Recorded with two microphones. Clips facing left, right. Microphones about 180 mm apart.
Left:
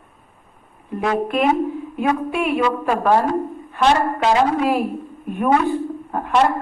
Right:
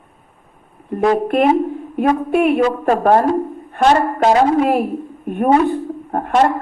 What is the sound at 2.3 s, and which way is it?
Speech, 55° right (ahead or behind).